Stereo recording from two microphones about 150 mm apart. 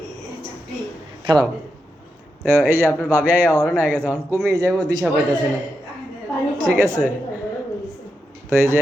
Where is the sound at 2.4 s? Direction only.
15° right (ahead or behind).